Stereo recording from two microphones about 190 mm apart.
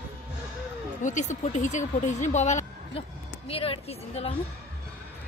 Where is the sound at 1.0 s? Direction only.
40° left (ahead or behind).